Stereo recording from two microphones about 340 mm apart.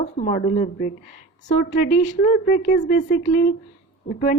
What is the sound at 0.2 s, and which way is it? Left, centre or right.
A woman's voice, left.